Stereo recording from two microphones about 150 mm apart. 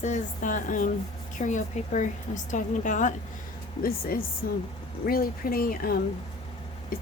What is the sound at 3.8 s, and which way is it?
Speech, 75° left (ahead or behind).